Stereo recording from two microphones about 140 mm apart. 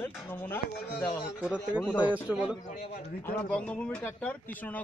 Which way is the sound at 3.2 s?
10° left (ahead or behind).